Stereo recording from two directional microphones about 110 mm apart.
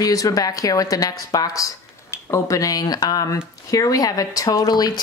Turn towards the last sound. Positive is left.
turn(degrees=35)  # may be behind; listen again after turning